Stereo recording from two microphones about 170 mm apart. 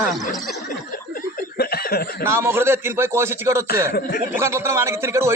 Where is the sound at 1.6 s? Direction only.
65° left (ahead or behind).